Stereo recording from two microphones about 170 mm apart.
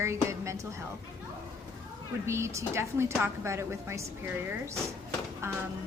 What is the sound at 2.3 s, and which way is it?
A woman's voice, 15° right (ahead or behind).